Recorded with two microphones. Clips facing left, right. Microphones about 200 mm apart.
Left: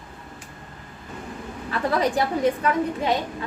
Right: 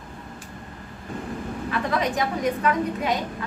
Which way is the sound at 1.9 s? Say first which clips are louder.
Left 4 dB; 35° left (ahead or behind).